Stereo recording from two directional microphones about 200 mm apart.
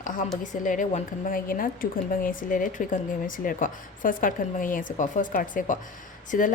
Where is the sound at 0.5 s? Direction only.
40° left (ahead or behind).